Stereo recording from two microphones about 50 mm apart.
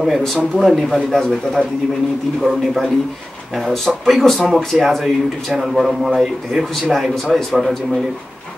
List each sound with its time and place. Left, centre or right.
0.0 s speech: centre